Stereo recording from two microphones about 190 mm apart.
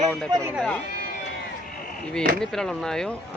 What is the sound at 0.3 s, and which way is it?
Speech, 20° right (ahead or behind).